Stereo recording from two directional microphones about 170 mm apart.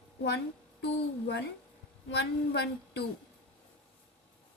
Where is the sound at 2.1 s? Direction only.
80° left.